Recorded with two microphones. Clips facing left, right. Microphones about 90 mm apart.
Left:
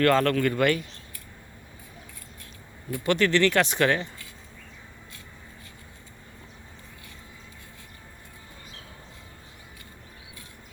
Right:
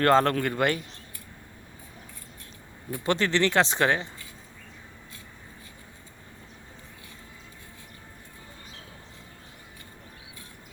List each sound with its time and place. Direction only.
0.0 s speech: 30° right (ahead or behind)
2.9 s speech: 30° right (ahead or behind)